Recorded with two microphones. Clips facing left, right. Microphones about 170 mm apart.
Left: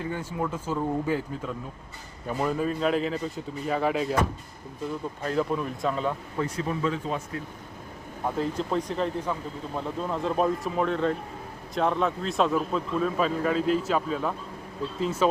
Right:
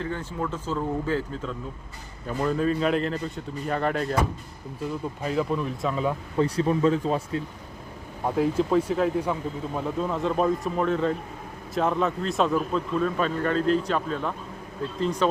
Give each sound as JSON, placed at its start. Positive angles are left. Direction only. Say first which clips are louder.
{"t": 0.0, "sound": "speech", "louder": "even", "side_deg": 10}
{"t": 2.4, "sound": "a man's voice", "louder": "right 2 dB", "side_deg": 5}
{"t": 5.2, "sound": "a man's voice", "louder": "right 1 dB", "side_deg": -5}
{"t": 6.4, "sound": "speech", "louder": "right 6 dB", "side_deg": -30}
{"t": 8.4, "sound": "a man's voice", "louder": "right 7 dB", "side_deg": -5}